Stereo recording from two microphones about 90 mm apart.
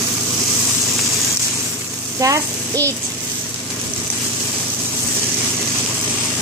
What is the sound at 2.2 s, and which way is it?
Frying, 40° right (ahead or behind).